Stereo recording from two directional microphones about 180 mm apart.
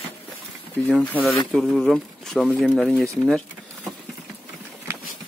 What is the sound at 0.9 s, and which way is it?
Speech, 5° left (ahead or behind).